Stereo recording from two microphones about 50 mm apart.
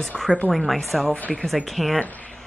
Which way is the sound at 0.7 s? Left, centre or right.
Centre.